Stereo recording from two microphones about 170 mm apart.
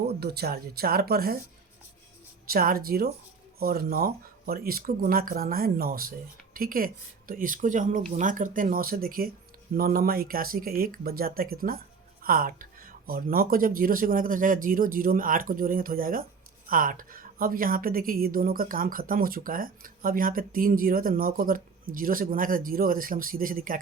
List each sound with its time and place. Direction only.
0.2 s a woman's voice: 70° right (ahead or behind)
2.5 s a woman's voice: 60° right (ahead or behind)